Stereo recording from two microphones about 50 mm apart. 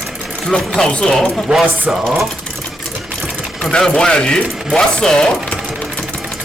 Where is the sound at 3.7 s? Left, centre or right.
Centre.